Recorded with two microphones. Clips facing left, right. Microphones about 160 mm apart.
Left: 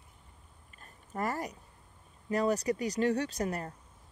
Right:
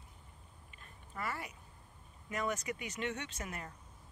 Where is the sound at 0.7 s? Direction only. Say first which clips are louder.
Left 8 dB; 40° left (ahead or behind).